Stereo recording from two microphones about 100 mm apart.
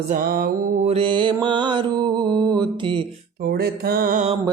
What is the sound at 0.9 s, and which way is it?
Mantra, 60° right (ahead or behind).